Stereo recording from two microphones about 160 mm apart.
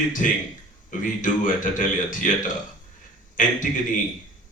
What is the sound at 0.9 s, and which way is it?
A man's voice, 55° left (ahead or behind).